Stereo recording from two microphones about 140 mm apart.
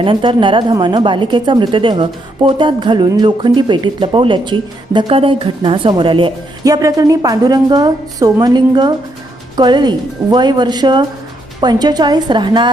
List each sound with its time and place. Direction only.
0.0 s a woman's voice: 35° right (ahead or behind)
6.7 s a woman's voice: 25° right (ahead or behind)